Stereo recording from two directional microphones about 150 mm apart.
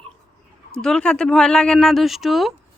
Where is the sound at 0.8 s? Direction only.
5° left (ahead or behind).